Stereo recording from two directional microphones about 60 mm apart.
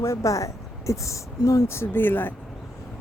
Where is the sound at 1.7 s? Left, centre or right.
Left.